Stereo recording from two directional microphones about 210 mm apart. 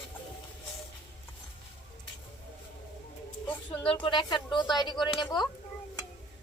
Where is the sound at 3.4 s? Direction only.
25° left (ahead or behind).